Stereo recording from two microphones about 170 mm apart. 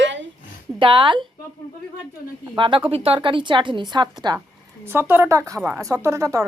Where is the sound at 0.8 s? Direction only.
30° right (ahead or behind).